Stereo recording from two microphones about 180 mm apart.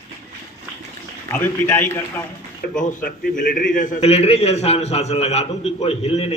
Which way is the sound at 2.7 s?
50° left (ahead or behind).